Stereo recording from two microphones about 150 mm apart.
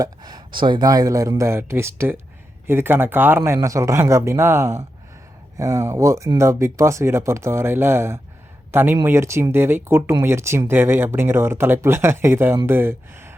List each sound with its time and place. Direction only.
0.0 s speech: 25° right (ahead or behind)